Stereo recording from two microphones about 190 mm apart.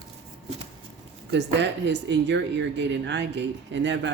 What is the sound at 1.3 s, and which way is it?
Speech, 65° right (ahead or behind).